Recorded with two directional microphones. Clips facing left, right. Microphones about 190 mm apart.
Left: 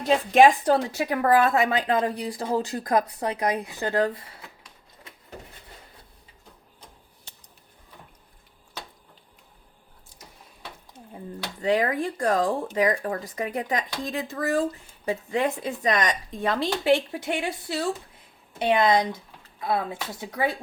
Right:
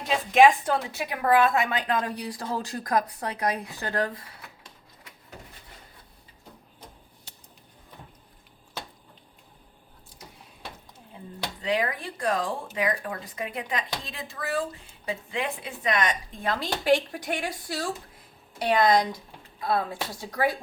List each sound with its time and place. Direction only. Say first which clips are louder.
0.1 s a woman's voice: left 2 dB; 35° left (ahead or behind)
11.6 s speech: left 5 dB; 45° left (ahead or behind); by 17.5 s 25° left (ahead or behind)
18.6 s a woman's voice: left 1 dB; 25° left (ahead or behind)